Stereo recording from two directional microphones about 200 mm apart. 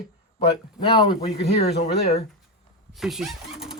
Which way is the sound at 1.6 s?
50° left (ahead or behind).